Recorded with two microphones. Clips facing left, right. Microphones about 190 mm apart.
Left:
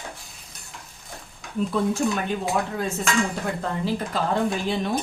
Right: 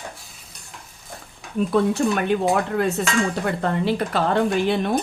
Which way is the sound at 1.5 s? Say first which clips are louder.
Right 4 dB; 65° right (ahead or behind).